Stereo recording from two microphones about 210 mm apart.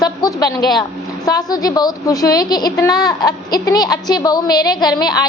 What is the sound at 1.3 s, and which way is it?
A woman's voice, 15° left (ahead or behind).